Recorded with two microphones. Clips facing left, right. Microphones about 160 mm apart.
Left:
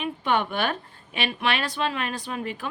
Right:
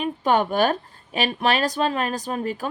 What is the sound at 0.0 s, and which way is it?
A woman's voice, 40° right (ahead or behind).